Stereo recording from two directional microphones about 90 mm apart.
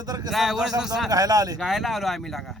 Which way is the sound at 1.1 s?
45° right (ahead or behind).